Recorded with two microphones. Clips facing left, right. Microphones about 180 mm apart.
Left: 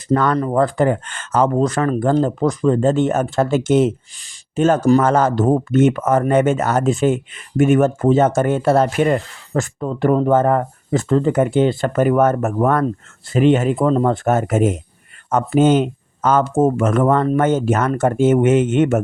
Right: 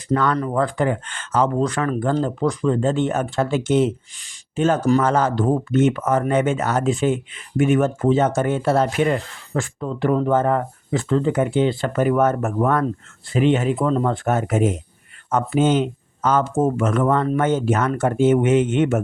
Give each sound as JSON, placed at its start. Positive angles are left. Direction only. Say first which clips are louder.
{"t": 0.1, "sound": "speech", "louder": "left 3 dB", "side_deg": 45}